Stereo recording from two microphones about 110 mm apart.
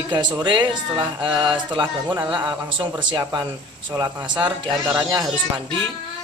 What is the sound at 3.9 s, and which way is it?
Speech, 35° right (ahead or behind).